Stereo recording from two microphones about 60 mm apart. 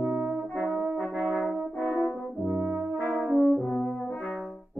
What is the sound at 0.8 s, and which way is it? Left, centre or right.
Brass instrument, right.